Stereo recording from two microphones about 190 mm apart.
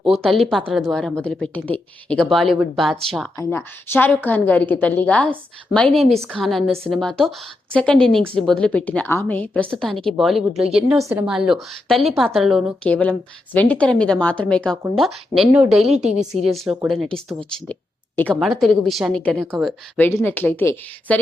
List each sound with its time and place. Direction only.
0.0 s speech: centre (ahead or behind)
3.3 s a woman's voice: 10° left (ahead or behind)
10.9 s a woman's voice: 15° right (ahead or behind)
11.3 s speech: centre (ahead or behind)
20.0 s a woman's voice: 10° left (ahead or behind)